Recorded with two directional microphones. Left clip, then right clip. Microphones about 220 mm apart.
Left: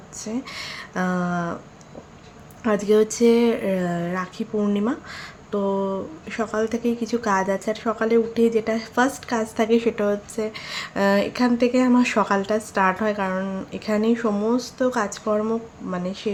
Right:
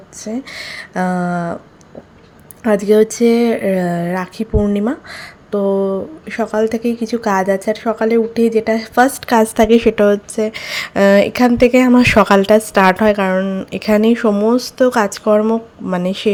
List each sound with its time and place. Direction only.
0.2 s speech: 20° right (ahead or behind)
2.6 s speech: 25° right (ahead or behind)